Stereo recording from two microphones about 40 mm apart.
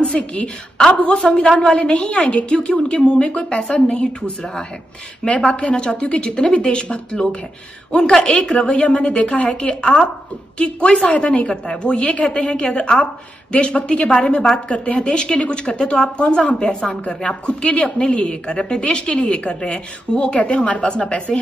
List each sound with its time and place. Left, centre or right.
0.0 s a woman's voice: left
8.0 s a woman's voice: centre
8.6 s a woman's voice: left